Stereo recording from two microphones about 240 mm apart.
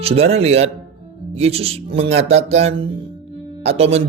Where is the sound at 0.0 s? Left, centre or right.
Right.